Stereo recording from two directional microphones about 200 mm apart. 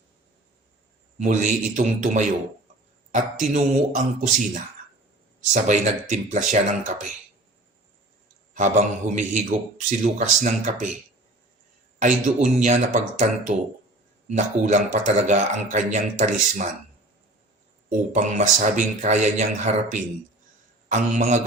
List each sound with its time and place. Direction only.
1.2 s speech: 35° right (ahead or behind)
8.5 s speech: 35° right (ahead or behind)
11.9 s speech: 35° right (ahead or behind)
17.8 s speech: 35° right (ahead or behind)